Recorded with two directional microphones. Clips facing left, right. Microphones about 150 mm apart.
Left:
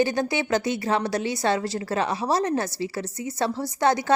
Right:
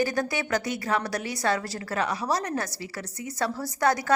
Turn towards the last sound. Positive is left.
turn(degrees=25)  # may be behind; listen again after turning